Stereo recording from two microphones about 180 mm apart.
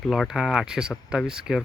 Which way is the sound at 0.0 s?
Centre (ahead or behind).